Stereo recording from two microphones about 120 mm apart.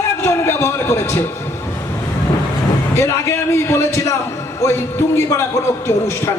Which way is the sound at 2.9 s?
20° left (ahead or behind).